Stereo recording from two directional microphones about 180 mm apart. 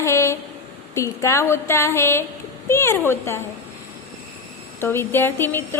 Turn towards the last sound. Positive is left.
turn(degrees=10)  # may be behind; listen again after turning